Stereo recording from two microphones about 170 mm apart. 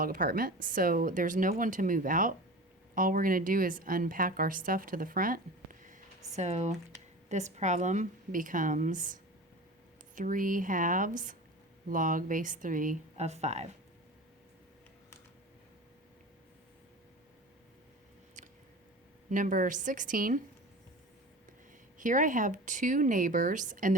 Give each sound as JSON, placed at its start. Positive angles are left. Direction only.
{"t": 0.0, "sound": "a woman's voice", "side_deg": -55}
{"t": 6.3, "sound": "a woman's voice", "side_deg": -40}
{"t": 18.4, "sound": "a sound", "side_deg": -45}
{"t": 19.3, "sound": "a woman's voice", "side_deg": -50}
{"t": 21.9, "sound": "a woman's voice", "side_deg": -50}